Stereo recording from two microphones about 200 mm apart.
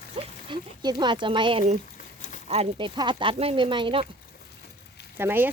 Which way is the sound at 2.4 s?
30° right (ahead or behind).